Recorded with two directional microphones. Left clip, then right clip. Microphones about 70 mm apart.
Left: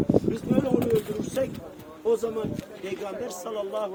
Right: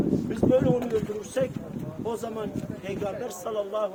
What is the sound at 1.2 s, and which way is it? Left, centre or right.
Speech, right.